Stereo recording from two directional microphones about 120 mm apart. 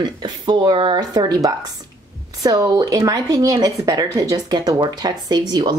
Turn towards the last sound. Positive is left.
turn(degrees=-35)  # may be behind; listen again after turning